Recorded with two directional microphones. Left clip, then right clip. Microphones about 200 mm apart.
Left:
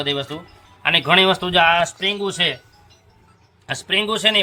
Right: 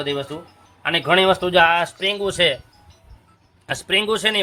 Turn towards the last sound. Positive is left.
turn(degrees=-35)  # may be behind; listen again after turning